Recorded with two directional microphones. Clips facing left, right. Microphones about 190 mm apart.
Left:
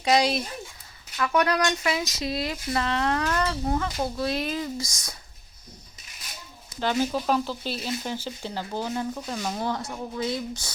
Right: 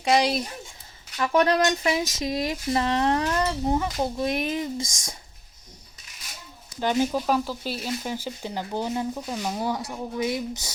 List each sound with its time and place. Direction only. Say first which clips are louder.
0.1 s speech: even; 10° right (ahead or behind)
1.1 s a sound: right 3 dB; 25° right (ahead or behind)
6.7 s speech: right 2 dB; 15° right (ahead or behind)